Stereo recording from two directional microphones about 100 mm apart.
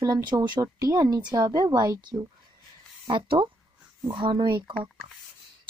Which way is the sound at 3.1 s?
60° right (ahead or behind).